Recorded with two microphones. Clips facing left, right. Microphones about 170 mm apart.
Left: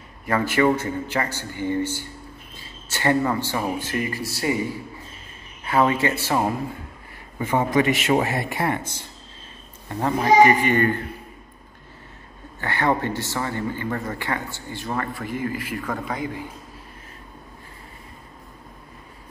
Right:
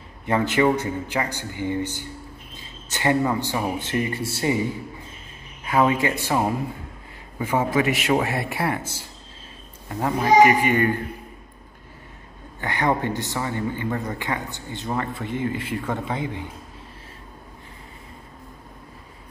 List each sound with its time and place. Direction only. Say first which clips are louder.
0.3 s a man's voice: even; 20° right (ahead or behind)
5.7 s speech: even; 15° right (ahead or behind)
7.3 s a man's voice: left 1 dB; 10° right (ahead or behind)
12.5 s speech: even; 15° right (ahead or behind)